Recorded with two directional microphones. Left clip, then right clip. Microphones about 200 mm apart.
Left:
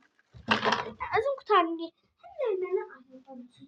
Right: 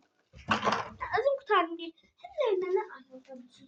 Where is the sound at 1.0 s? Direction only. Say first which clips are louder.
Right 3 dB; 50° left (ahead or behind).